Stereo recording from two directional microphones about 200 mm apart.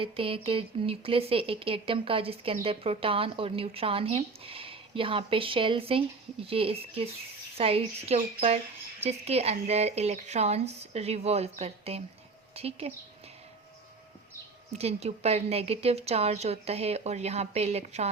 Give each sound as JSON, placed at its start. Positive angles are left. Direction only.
{"t": 0.0, "sound": "a woman's voice", "side_deg": -25}
{"t": 14.7, "sound": "a woman's voice", "side_deg": -30}